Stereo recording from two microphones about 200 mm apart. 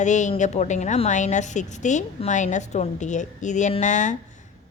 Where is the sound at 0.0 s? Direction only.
35° left (ahead or behind).